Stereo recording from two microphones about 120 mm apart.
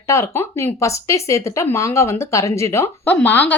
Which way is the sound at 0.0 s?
25° left (ahead or behind).